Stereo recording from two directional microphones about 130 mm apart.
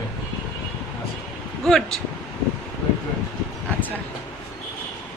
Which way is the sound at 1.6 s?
5° left (ahead or behind).